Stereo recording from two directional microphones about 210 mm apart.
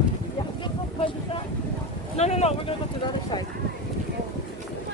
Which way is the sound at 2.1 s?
30° left (ahead or behind).